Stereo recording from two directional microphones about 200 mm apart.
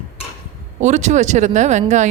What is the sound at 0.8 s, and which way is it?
A woman's voice, 35° right (ahead or behind).